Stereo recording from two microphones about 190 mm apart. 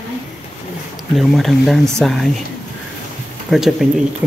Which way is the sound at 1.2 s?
Centre (ahead or behind).